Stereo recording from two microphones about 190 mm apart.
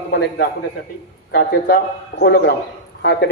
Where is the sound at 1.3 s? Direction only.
60° left (ahead or behind).